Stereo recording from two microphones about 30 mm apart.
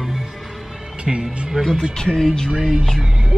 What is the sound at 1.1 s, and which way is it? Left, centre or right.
Speech, centre.